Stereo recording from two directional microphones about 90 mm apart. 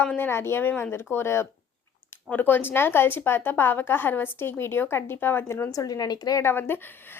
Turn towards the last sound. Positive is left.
turn(degrees=25)  # may be behind; listen again after turning